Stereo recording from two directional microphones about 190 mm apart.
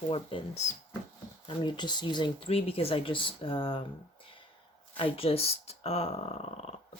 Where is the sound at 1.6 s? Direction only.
25° left (ahead or behind).